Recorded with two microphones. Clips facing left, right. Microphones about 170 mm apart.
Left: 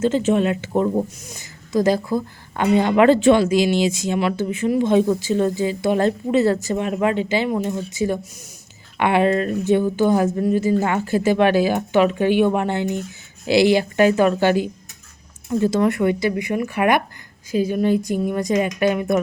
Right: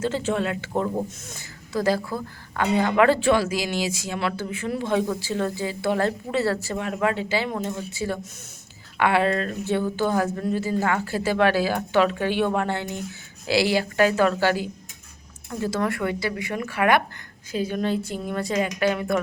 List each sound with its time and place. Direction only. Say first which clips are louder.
0.0 s a woman's voice: left 7 dB; 20° left (ahead or behind)